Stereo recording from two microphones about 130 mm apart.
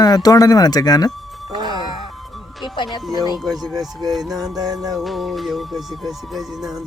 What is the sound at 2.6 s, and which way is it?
Speech, 35° left (ahead or behind).